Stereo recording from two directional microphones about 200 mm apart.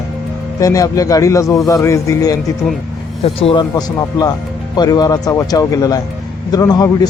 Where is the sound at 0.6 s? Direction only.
15° left (ahead or behind).